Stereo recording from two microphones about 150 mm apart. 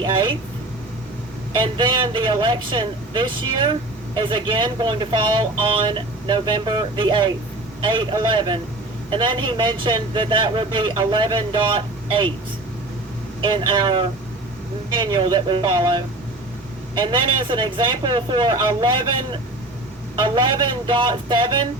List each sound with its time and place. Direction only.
0.0 s a sound: 30° right (ahead or behind)
1.5 s a man's voice: 35° right (ahead or behind)
13.4 s a man's voice: 30° right (ahead or behind)